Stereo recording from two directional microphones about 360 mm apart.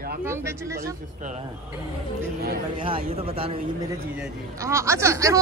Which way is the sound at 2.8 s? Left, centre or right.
Centre.